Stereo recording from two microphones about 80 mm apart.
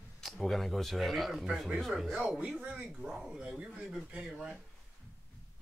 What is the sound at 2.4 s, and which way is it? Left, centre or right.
Speech, centre.